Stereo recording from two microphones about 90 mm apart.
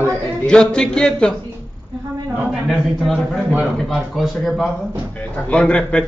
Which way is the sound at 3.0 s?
Centre (ahead or behind).